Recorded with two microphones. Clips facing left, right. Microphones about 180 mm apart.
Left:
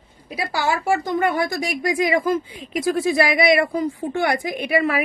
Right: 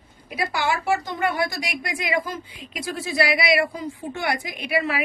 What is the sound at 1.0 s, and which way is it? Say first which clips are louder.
Speech: left 4 dB; 45° left (ahead or behind).